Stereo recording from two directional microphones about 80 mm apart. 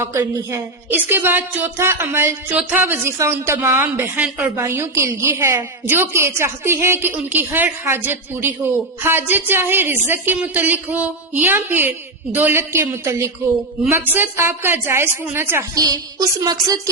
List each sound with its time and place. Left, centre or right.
0.0 s a woman's voice: right
1.1 s a woman's voice: right
4.2 s a woman's voice: right
4.6 s a woman's voice: right
13.9 s a woman's voice: right
15.7 s music: right